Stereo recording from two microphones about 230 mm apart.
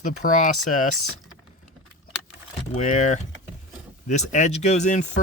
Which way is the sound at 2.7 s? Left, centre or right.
Left.